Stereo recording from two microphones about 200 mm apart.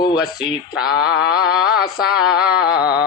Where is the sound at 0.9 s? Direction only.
50° left (ahead or behind).